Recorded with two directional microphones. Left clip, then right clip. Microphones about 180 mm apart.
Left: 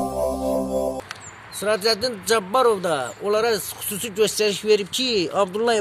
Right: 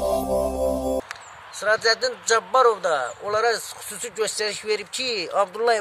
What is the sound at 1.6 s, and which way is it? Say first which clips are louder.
A man's voice: right 1 dB; 15° right (ahead or behind).